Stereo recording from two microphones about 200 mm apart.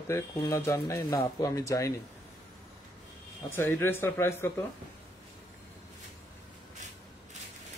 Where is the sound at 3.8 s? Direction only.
10° left (ahead or behind).